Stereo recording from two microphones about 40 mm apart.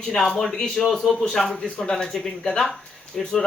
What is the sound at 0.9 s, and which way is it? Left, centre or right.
Speech, centre.